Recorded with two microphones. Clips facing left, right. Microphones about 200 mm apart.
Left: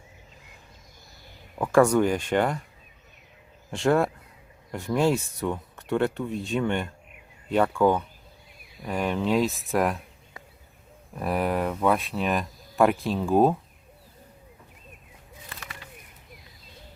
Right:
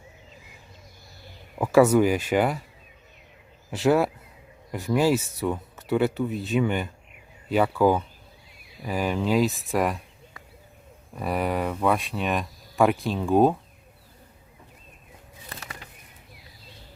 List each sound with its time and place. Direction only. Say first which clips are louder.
1.5 s speech: right 2 dB; 5° right (ahead or behind)
3.7 s speech: right 1 dB; 5° right (ahead or behind)
11.1 s speech: even; centre (ahead or behind)
15.4 s bird: right 3 dB; 40° right (ahead or behind)